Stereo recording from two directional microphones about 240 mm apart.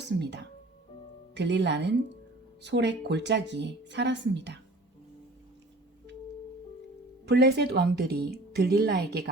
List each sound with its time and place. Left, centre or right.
0.2 s a woman's voice: right
7.3 s a woman's voice: right